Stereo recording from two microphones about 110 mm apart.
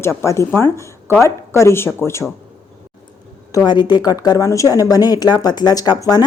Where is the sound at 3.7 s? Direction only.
40° left (ahead or behind).